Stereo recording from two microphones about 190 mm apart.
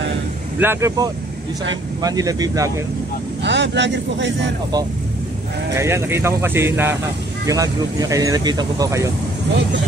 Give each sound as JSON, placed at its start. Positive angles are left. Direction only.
{"t": 0.6, "sound": "speech", "side_deg": -15}
{"t": 3.4, "sound": "a man's voice", "side_deg": -70}
{"t": 5.8, "sound": "speech", "side_deg": -15}